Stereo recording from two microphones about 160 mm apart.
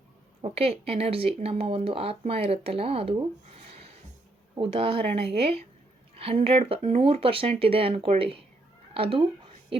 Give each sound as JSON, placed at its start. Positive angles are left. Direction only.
{"t": 0.4, "sound": "speech", "side_deg": -40}
{"t": 4.5, "sound": "speech", "side_deg": -35}